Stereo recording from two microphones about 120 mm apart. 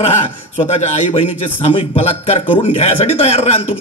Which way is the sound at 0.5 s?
60° left (ahead or behind).